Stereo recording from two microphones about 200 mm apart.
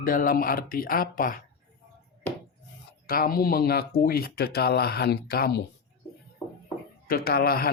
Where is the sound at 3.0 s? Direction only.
45° left (ahead or behind).